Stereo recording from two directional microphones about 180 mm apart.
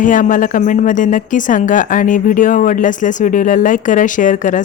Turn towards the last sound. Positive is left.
turn(degrees=45)  # may be behind; listen again after turning